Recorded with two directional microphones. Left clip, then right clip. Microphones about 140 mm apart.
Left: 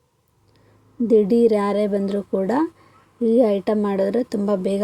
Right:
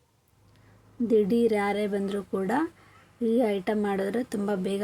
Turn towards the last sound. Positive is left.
turn(degrees=15)  # may be behind; listen again after turning